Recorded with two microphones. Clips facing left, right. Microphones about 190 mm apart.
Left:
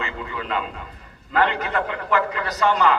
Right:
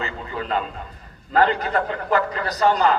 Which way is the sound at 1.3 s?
35° right (ahead or behind).